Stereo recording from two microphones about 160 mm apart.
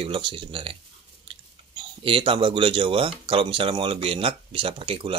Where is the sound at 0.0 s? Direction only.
30° right (ahead or behind).